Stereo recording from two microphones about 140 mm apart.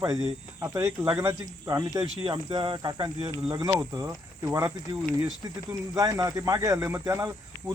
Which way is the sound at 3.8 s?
25° right (ahead or behind).